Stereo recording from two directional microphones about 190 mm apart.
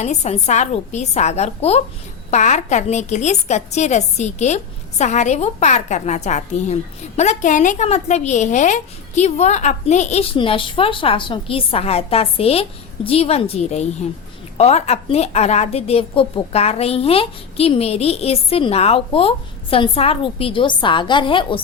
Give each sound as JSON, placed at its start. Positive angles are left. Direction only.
{"t": 0.0, "sound": "a woman's voice", "side_deg": 35}